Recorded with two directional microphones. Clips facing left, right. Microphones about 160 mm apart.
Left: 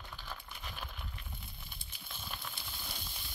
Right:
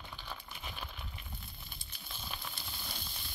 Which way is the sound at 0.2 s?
10° right (ahead or behind).